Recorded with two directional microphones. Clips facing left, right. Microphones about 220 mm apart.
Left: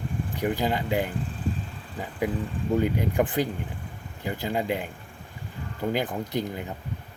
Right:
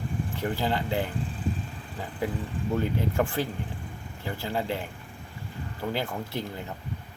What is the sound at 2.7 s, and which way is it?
Speech, 15° left (ahead or behind).